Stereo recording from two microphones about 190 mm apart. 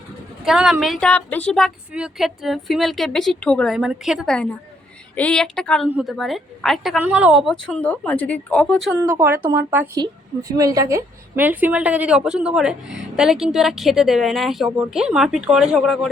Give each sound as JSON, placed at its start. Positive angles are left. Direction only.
{"t": 0.4, "sound": "a woman's voice", "side_deg": 0}
{"t": 8.9, "sound": "a woman's voice", "side_deg": -10}